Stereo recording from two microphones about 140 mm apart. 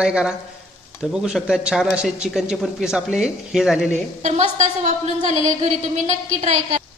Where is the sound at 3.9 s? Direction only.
55° right (ahead or behind).